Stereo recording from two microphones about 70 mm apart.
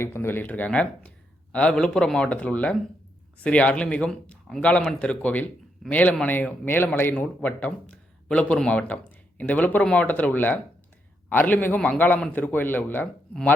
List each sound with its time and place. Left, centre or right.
0.0 s speech: left